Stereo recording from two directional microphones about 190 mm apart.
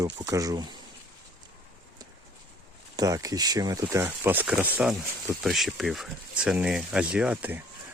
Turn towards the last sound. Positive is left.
turn(degrees=-10)  # may be behind; listen again after turning